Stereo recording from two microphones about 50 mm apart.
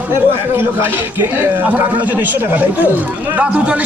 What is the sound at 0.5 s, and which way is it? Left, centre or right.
Speech, right.